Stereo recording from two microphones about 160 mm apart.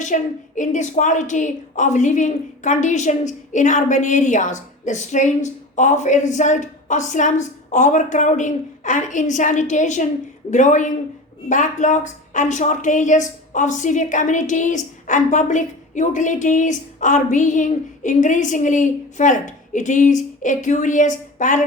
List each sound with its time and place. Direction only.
0.0 s a woman's voice: 50° left (ahead or behind)